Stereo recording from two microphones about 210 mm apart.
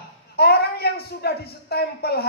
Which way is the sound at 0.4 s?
50° left (ahead or behind).